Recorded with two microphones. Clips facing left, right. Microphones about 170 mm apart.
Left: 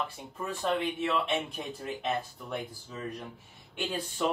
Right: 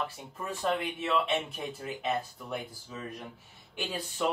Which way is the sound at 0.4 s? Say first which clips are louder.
Left 1 dB; 10° right (ahead or behind).